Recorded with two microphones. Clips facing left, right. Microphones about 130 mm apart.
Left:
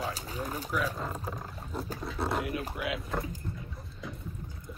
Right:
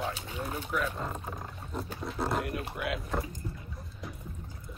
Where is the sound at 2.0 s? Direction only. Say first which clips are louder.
Right 1 dB; centre (ahead or behind).